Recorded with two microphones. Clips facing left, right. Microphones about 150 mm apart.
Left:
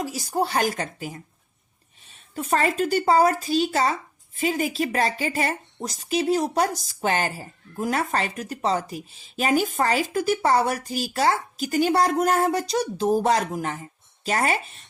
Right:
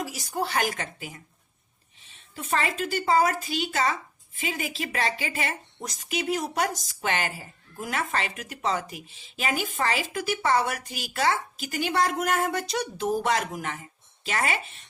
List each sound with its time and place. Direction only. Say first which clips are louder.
0.0 s a woman's voice: left 5 dB; 35° left (ahead or behind)